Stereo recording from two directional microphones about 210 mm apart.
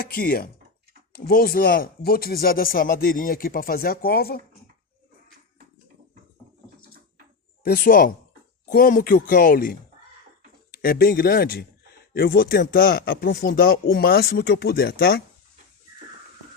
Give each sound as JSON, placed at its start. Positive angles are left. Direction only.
{"t": 0.0, "sound": "speech", "side_deg": 45}
{"t": 7.6, "sound": "speech", "side_deg": 45}